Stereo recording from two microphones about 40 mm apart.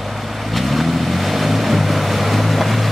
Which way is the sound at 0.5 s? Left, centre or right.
Centre.